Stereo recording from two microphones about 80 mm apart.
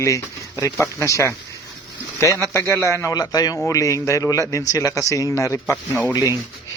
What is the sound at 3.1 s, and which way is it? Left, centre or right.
Speech, left.